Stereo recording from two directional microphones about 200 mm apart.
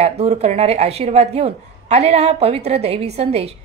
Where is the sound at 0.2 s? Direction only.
30° right (ahead or behind).